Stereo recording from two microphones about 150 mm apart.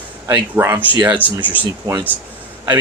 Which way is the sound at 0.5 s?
15° right (ahead or behind).